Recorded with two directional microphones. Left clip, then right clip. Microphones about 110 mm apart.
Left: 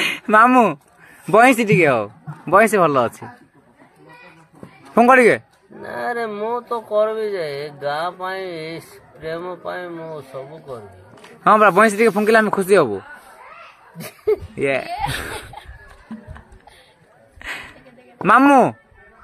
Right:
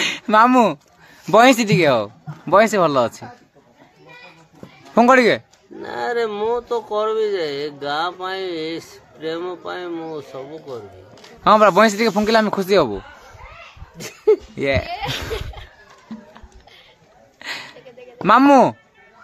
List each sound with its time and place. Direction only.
0.0 s speech: 10° left (ahead or behind)
1.3 s a man's voice: 5° right (ahead or behind)
2.7 s speech: 10° left (ahead or behind)
4.9 s a man's voice: 5° left (ahead or behind)
5.8 s speech: 30° right (ahead or behind)
11.2 s a man's voice: centre (ahead or behind)
13.9 s a sound: 30° right (ahead or behind)
14.5 s speech: centre (ahead or behind)
17.4 s a sound: centre (ahead or behind)
18.2 s a man's voice: centre (ahead or behind)